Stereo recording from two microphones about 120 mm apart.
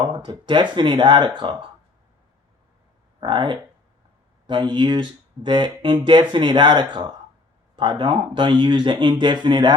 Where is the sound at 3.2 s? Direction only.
40° right (ahead or behind).